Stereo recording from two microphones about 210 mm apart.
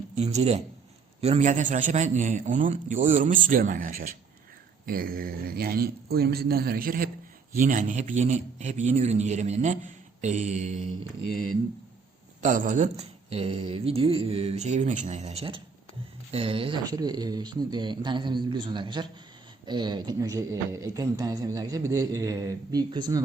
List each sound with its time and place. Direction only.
0.2 s a man's voice: 30° right (ahead or behind)
12.4 s a man's voice: 35° right (ahead or behind); by 23.2 s 20° right (ahead or behind)